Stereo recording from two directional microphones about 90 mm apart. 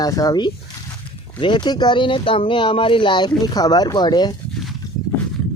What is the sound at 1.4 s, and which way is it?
Speech, 55° left (ahead or behind).